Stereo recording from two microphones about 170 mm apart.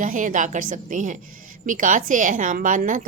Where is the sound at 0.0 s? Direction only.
50° right (ahead or behind).